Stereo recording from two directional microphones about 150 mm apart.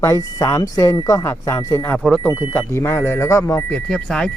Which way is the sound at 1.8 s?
10° left (ahead or behind).